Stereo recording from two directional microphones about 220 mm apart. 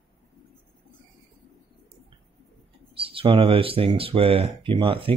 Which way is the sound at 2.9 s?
25° right (ahead or behind).